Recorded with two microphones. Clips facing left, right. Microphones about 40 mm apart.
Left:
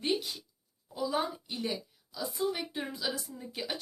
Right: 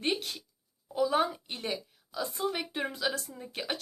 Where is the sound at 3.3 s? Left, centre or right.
Right.